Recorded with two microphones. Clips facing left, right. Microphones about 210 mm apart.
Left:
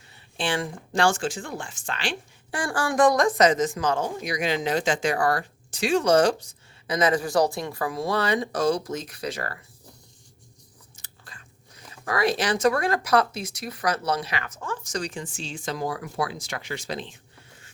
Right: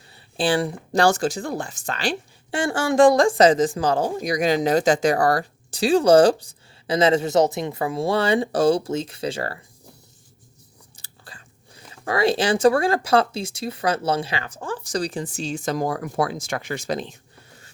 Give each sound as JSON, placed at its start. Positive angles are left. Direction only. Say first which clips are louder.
{"t": 0.1, "sound": "speech", "louder": "right 6 dB", "side_deg": -35}
{"t": 2.6, "sound": "speech", "louder": "right 5 dB", "side_deg": -25}
{"t": 10.9, "sound": "speech", "louder": "right 4 dB", "side_deg": -30}